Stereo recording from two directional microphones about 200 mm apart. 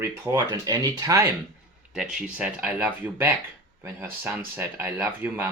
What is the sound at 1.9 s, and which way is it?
Speech, 5° right (ahead or behind).